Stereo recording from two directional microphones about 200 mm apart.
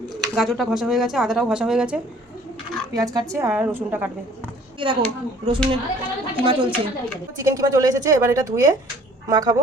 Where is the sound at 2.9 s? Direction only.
20° right (ahead or behind).